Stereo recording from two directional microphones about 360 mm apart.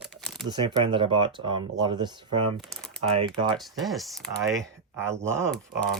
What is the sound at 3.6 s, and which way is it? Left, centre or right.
Speech, centre.